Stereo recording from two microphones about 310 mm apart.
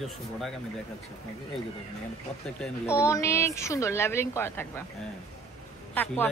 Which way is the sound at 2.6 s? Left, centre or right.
Centre.